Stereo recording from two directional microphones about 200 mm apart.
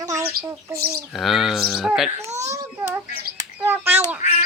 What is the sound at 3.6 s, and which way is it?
Bird, 10° right (ahead or behind).